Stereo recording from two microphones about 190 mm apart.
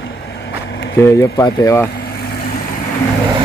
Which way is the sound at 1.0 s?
15° left (ahead or behind).